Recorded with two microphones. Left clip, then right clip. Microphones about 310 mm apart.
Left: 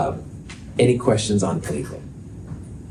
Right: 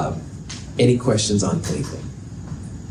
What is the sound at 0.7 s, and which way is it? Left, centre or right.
Speech, left.